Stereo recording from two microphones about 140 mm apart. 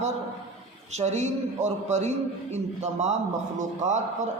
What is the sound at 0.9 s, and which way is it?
A man's voice, 55° right (ahead or behind).